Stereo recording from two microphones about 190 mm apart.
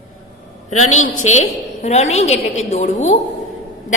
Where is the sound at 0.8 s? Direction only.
90° left.